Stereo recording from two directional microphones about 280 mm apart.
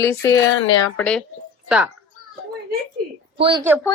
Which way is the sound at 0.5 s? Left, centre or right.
Left.